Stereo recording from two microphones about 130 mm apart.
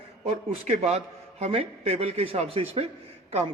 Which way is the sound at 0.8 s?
55° right (ahead or behind).